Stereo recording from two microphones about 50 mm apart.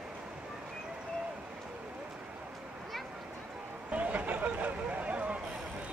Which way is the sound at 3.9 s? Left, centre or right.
Right.